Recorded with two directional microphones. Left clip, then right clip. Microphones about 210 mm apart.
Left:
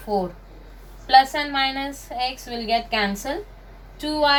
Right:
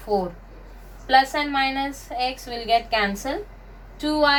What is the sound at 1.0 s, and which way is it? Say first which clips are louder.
A woman's voice: left 2 dB; 10° right (ahead or behind).